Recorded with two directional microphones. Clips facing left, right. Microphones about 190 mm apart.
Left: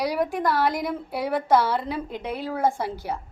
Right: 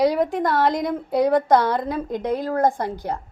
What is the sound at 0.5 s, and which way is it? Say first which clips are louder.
A woman's voice: right 4 dB; 20° right (ahead or behind).